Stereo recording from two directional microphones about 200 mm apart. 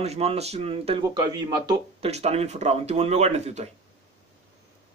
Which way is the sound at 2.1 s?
35° right (ahead or behind).